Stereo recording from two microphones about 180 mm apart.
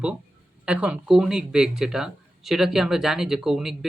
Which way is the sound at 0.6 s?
5° right (ahead or behind).